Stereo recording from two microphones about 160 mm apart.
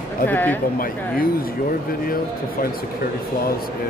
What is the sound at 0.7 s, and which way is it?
Speech, 65° left (ahead or behind).